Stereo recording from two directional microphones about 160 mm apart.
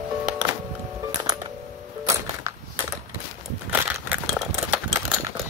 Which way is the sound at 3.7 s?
10° right (ahead or behind).